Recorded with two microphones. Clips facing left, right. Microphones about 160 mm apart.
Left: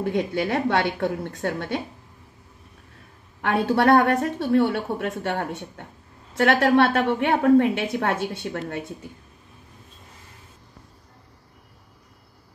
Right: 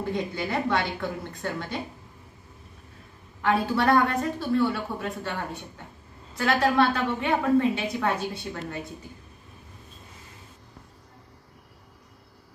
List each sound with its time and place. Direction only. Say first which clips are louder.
0.0 s a woman's voice: left 5 dB; 70° left (ahead or behind)
3.4 s a woman's voice: left 4 dB; 65° left (ahead or behind)